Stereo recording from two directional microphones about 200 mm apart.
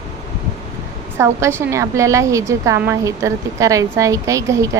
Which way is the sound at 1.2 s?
15° right (ahead or behind).